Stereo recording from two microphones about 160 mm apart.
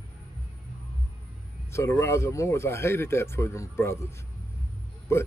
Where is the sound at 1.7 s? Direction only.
15° left (ahead or behind).